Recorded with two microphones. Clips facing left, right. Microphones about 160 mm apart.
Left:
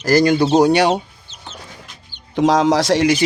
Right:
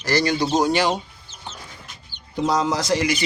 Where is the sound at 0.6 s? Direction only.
70° left (ahead or behind).